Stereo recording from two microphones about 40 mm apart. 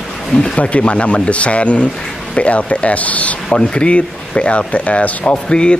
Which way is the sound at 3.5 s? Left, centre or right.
Left.